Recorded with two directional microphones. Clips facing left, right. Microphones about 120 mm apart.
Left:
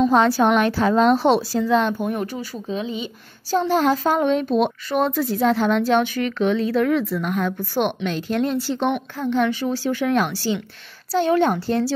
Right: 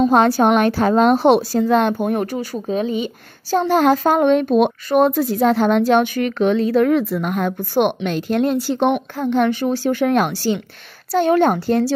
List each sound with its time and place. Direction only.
0.4 s speech: 50° right (ahead or behind)
3.4 s a child's voice: 60° right (ahead or behind)
4.8 s speech: 50° right (ahead or behind)